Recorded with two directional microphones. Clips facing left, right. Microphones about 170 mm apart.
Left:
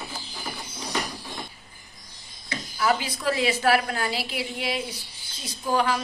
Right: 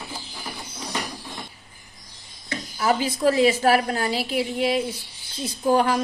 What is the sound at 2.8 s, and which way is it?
A woman's voice, 40° right (ahead or behind).